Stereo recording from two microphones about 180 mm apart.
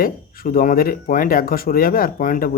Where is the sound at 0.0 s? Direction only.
55° left (ahead or behind).